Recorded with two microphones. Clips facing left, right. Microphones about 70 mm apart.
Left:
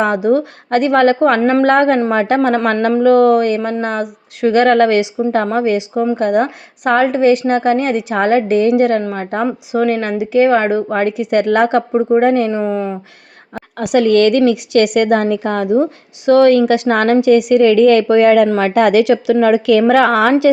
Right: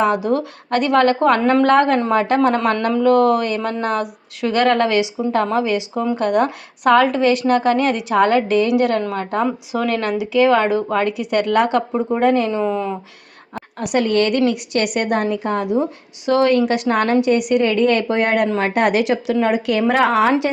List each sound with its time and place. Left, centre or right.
0.0 s speech: left
0.3 s speech: left
4.6 s speech: left
5.5 s a woman's voice: left
12.2 s a woman's voice: left
13.7 s a woman's voice: left